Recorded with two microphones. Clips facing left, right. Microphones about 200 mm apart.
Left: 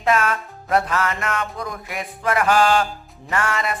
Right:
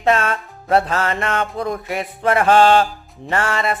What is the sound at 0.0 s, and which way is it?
Speech, 30° right (ahead or behind).